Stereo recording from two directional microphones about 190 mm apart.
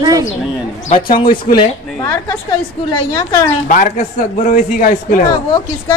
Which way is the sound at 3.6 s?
40° left (ahead or behind).